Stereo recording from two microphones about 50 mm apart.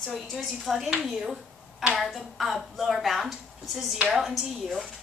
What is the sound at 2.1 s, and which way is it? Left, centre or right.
A woman's voice, centre.